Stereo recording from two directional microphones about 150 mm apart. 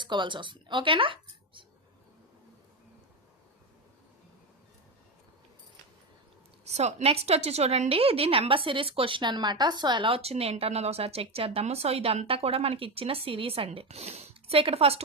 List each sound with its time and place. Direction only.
0.0 s a woman's voice: 30° right (ahead or behind)
6.7 s a woman's voice: 45° right (ahead or behind)